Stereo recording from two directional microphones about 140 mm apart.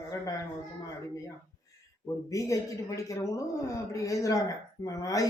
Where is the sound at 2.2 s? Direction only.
25° left (ahead or behind).